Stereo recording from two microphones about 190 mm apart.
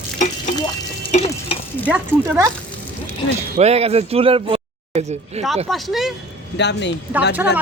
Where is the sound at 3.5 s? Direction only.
35° right (ahead or behind).